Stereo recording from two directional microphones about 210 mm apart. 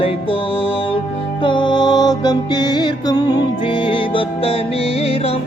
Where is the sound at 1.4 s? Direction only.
20° left (ahead or behind).